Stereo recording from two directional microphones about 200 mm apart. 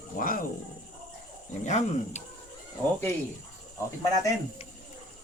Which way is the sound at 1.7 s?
35° left (ahead or behind).